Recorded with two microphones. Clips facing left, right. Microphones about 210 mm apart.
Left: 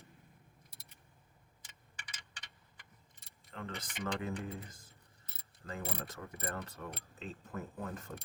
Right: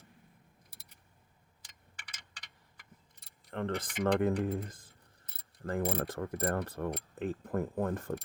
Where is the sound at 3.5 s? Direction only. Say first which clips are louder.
Right 10 dB; 60° right (ahead or behind).